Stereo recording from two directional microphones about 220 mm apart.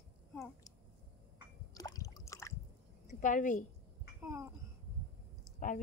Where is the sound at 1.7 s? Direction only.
15° left (ahead or behind).